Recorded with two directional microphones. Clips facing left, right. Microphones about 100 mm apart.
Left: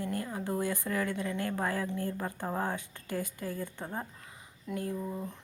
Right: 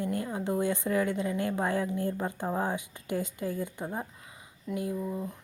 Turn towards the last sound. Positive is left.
turn(degrees=-5)  # may be behind; listen again after turning